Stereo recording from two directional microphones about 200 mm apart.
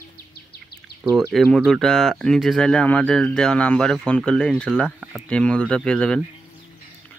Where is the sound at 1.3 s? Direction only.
Centre (ahead or behind).